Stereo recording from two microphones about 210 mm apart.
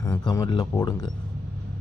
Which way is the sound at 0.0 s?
15° left (ahead or behind).